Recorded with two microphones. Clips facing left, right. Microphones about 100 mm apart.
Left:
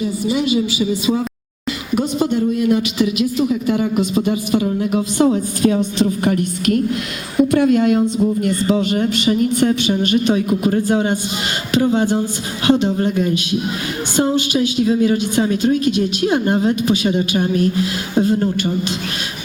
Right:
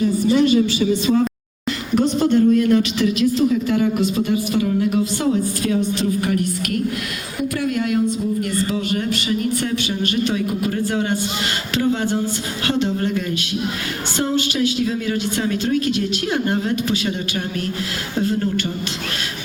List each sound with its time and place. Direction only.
0.0 s a woman's voice: 10° left (ahead or behind)